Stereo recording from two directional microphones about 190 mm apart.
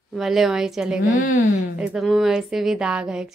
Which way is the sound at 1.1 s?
40° left (ahead or behind).